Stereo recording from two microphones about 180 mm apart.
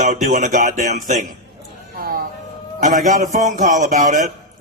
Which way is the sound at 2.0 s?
55° right (ahead or behind).